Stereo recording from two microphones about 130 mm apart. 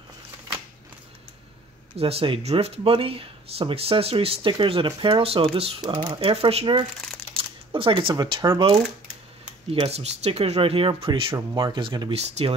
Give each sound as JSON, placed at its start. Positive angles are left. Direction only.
{"t": 2.0, "sound": "speech", "side_deg": -50}
{"t": 9.7, "sound": "speech", "side_deg": -50}
{"t": 11.3, "sound": "speech", "side_deg": -35}
{"t": 12.1, "sound": "speech", "side_deg": -50}